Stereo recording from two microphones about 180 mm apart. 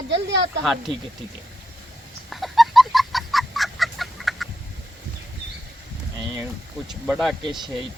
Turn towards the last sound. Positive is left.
turn(degrees=0)  # may be behind; listen again after turning